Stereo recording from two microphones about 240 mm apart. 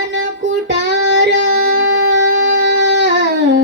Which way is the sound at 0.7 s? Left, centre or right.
Right.